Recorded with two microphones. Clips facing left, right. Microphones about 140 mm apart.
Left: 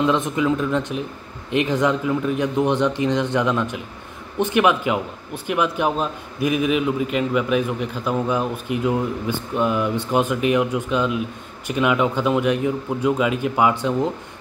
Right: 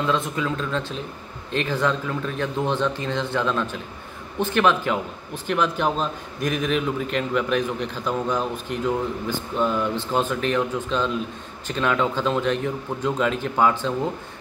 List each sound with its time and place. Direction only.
0.0 s a man's voice: 20° left (ahead or behind)